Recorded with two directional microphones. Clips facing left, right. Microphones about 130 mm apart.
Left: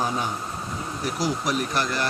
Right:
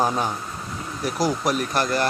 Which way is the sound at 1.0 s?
45° right (ahead or behind).